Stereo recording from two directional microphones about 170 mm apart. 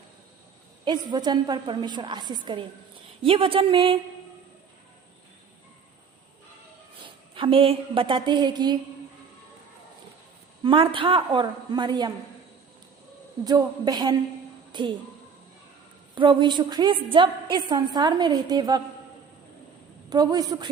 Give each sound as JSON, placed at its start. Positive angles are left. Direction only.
{"t": 0.9, "sound": "a woman's voice", "side_deg": -25}
{"t": 7.0, "sound": "a woman's voice", "side_deg": -30}
{"t": 10.6, "sound": "a woman's voice", "side_deg": -30}
{"t": 13.4, "sound": "a woman's voice", "side_deg": -25}
{"t": 16.1, "sound": "a woman's voice", "side_deg": -30}
{"t": 20.1, "sound": "a woman's voice", "side_deg": -25}